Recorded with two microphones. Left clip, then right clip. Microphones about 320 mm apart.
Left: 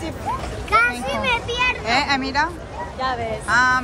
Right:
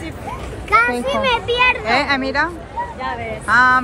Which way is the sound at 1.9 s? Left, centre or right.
Centre.